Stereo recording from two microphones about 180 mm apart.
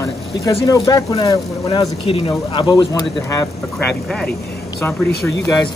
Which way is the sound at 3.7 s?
5° left (ahead or behind).